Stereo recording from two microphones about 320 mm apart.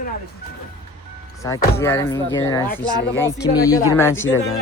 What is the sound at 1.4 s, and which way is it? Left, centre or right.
Speech, centre.